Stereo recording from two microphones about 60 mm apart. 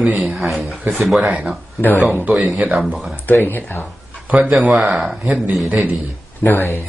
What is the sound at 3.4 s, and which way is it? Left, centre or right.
Speech, left.